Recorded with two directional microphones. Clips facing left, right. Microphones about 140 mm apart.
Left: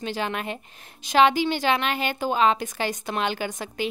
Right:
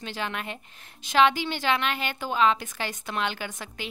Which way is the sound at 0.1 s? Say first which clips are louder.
Left 4 dB; 40° left (ahead or behind).